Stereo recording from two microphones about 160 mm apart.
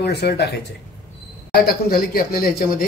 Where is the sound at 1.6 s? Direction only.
70° left (ahead or behind).